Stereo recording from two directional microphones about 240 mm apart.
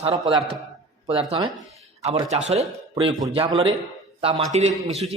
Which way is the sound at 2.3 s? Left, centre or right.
Right.